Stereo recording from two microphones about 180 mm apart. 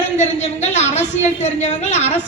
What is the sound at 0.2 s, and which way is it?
A woman's voice, 40° left (ahead or behind).